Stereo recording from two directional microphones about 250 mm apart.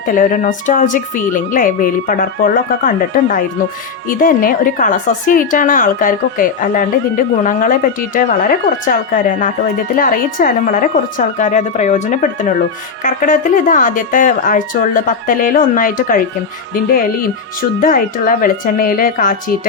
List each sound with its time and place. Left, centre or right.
0.1 s speech: left